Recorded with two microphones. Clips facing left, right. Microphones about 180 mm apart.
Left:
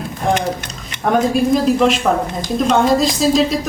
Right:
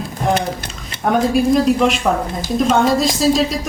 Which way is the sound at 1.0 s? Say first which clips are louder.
Even; centre (ahead or behind).